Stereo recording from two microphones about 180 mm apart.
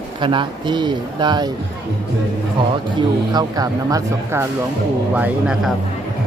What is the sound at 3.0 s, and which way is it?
Speech, 20° right (ahead or behind).